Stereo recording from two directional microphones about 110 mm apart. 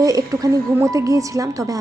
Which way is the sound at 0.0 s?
35° right (ahead or behind).